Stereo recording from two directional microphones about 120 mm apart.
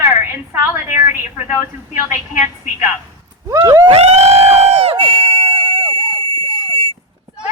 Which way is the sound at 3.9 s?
60° right (ahead or behind).